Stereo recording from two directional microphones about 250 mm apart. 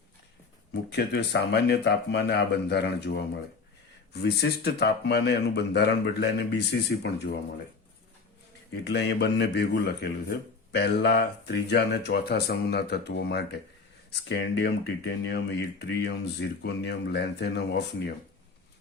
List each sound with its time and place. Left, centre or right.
0.7 s a man's voice: left
8.7 s a man's voice: left